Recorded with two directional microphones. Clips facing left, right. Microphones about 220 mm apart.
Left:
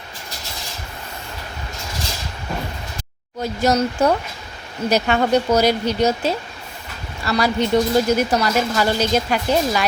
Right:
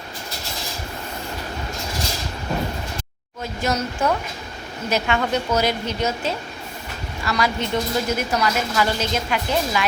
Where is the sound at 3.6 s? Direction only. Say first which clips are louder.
Left 5 dB; 35° left (ahead or behind).